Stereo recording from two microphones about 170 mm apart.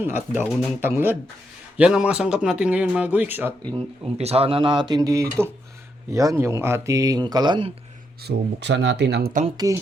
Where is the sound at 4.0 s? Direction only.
35° right (ahead or behind).